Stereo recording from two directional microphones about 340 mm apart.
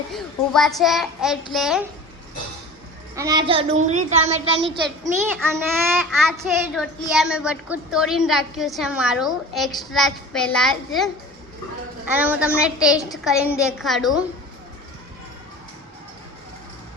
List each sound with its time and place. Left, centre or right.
0.1 s a child's voice: centre
3.2 s a child's voice: centre; by 5.1 s right
5.8 s a child's voice: centre
12.1 s a child's voice: centre